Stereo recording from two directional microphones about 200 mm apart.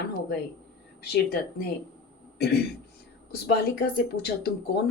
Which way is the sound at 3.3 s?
50° left (ahead or behind).